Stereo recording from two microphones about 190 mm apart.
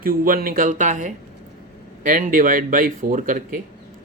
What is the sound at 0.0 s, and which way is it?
Speech, 50° right (ahead or behind).